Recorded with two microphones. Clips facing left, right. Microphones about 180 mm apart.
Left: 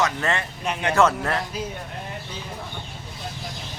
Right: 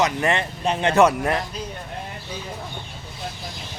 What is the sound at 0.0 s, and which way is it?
Speech, 15° right (ahead or behind).